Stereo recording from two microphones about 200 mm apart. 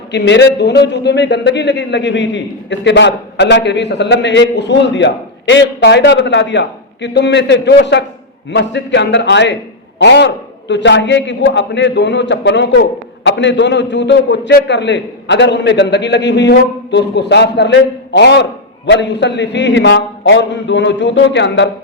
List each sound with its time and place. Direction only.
0.1 s a man's voice: 60° left (ahead or behind)